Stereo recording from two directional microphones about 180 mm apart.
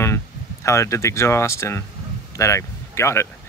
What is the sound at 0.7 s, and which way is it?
Speech, 15° left (ahead or behind).